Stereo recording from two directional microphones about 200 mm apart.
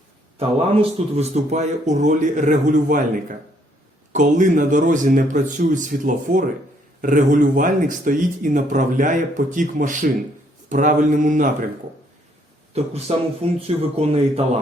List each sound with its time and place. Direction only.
0.3 s speech: 30° right (ahead or behind)
12.7 s speech: 30° right (ahead or behind)